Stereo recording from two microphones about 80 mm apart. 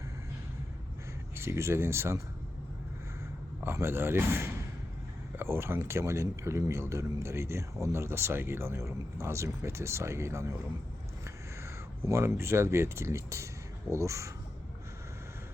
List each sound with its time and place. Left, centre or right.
1.4 s speech: right
3.6 s a man's voice: right
11.6 s speech: right